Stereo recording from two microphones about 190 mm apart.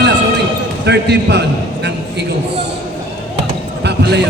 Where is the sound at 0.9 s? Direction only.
60° right (ahead or behind).